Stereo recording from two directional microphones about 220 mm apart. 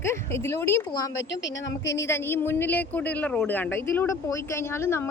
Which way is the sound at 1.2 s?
55° left (ahead or behind).